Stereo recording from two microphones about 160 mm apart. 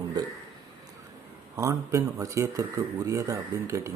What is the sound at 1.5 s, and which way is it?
Speech, 20° right (ahead or behind).